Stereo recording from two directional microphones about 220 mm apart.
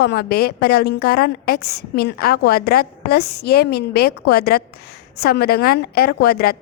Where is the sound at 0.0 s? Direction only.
45° left (ahead or behind).